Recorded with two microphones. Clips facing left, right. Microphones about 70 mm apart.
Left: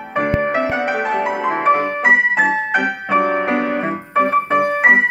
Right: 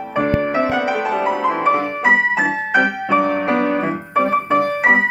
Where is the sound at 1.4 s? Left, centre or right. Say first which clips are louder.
Left 3 dB; left.